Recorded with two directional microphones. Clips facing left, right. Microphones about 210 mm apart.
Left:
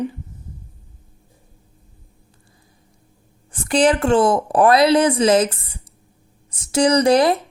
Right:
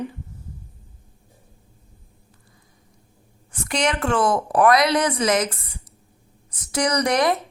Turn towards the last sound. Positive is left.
turn(degrees=30)  # may be behind; listen again after turning